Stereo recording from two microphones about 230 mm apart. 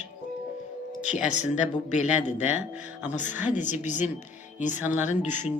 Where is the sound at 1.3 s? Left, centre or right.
Left.